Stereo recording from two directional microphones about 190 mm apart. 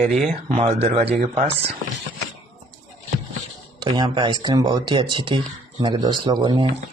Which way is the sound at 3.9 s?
25° right (ahead or behind).